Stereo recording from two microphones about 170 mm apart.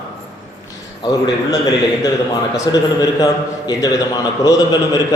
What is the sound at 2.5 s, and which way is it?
A man's voice, 25° left (ahead or behind).